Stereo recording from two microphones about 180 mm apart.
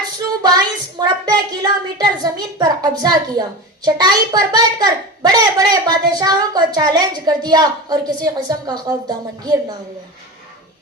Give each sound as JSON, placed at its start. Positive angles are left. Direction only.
{"t": 0.2, "sound": "a woman's voice", "side_deg": -20}